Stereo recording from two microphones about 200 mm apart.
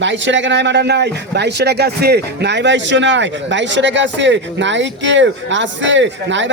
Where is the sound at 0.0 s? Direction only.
65° right (ahead or behind).